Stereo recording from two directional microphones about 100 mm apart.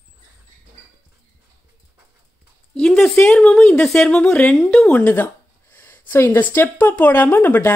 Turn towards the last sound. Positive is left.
turn(degrees=20)  # may be behind; listen again after turning